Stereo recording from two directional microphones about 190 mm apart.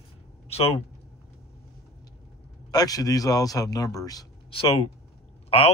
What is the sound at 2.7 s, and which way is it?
Speech, 20° left (ahead or behind).